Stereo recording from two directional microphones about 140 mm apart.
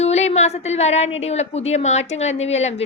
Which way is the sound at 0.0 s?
50° left (ahead or behind).